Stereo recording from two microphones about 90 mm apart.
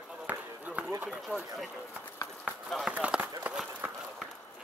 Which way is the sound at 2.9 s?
15° right (ahead or behind).